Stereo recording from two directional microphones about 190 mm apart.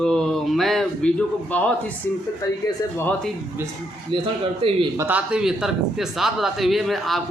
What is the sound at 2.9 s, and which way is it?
Speech, 10° left (ahead or behind).